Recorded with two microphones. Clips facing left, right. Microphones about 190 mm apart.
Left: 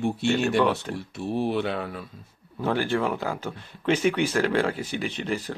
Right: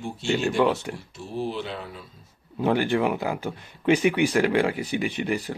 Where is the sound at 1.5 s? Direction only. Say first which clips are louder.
Left 5 dB; 60° left (ahead or behind).